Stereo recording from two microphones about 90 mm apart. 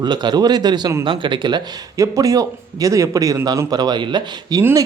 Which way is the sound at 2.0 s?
40° right (ahead or behind).